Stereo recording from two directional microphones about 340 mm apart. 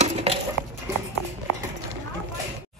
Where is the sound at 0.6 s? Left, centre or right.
Right.